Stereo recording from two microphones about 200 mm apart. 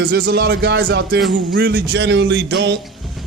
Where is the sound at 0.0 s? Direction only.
50° right (ahead or behind).